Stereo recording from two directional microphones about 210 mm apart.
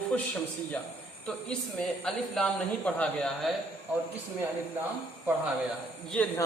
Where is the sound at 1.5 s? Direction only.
Centre (ahead or behind).